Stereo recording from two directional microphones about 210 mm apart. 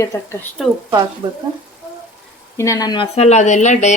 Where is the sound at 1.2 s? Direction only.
25° right (ahead or behind).